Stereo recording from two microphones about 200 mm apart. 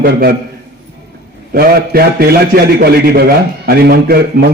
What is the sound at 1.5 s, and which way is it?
A man's voice, 50° right (ahead or behind).